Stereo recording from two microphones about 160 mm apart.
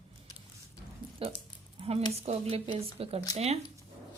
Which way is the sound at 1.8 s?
40° right (ahead or behind).